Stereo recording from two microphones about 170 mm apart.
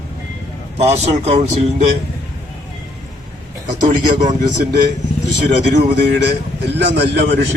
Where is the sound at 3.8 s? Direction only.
45° right (ahead or behind).